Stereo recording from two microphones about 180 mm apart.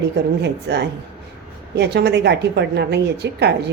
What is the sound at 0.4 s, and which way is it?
A woman's voice, 70° right (ahead or behind).